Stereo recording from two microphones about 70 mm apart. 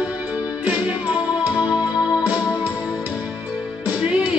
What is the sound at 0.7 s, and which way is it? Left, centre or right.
Music, centre.